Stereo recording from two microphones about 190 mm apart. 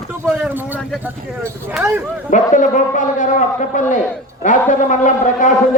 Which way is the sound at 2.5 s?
40° left (ahead or behind).